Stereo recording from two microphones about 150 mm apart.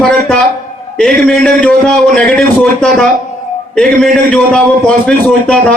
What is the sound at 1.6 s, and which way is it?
A man's voice, 5° left (ahead or behind).